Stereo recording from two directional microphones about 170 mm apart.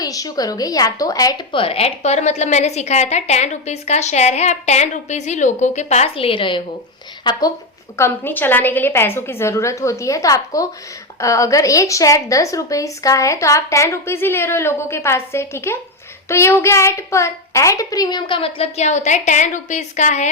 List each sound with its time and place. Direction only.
0.0 s a child's voice: 20° left (ahead or behind)
1.6 s a woman's voice: 35° left (ahead or behind)